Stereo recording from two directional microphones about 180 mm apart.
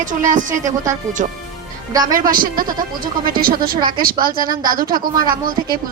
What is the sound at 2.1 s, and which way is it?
Speech, 50° right (ahead or behind).